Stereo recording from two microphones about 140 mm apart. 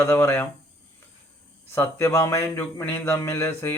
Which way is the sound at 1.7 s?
20° left (ahead or behind).